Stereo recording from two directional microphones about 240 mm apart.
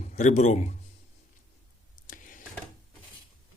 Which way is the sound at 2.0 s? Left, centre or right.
Left.